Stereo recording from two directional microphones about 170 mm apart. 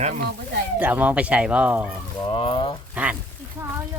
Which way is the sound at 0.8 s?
10° right (ahead or behind).